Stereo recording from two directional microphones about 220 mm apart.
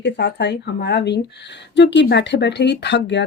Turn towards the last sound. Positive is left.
turn(degrees=55)  # may be behind; listen again after turning